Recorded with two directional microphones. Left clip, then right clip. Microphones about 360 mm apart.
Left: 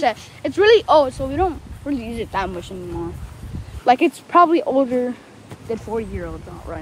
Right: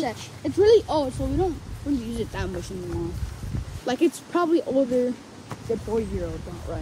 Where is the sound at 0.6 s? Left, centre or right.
Centre.